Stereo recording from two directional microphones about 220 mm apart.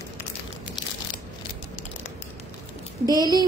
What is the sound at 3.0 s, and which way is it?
Speech, 15° right (ahead or behind).